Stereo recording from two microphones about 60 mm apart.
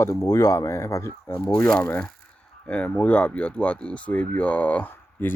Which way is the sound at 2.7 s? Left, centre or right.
Left.